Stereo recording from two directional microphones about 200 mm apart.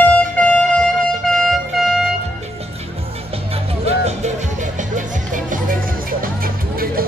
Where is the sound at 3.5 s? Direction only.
30° right (ahead or behind).